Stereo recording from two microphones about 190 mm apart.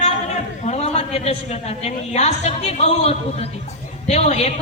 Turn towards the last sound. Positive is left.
turn(degrees=35)  # may be behind; listen again after turning